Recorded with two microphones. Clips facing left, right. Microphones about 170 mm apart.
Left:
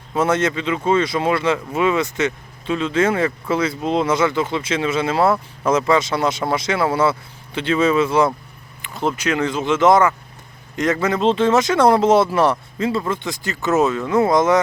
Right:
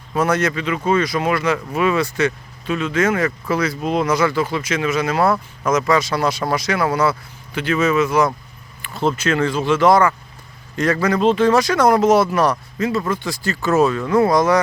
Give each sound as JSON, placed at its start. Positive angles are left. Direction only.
{"t": 0.1, "sound": "speech", "side_deg": 25}
{"t": 8.8, "sound": "speech", "side_deg": 15}